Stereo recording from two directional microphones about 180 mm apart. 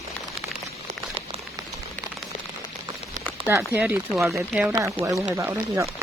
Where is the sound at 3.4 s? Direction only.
10° right (ahead or behind).